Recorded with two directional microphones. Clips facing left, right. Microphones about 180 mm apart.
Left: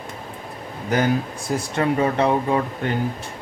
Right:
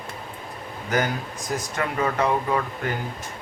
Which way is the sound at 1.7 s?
30° left (ahead or behind).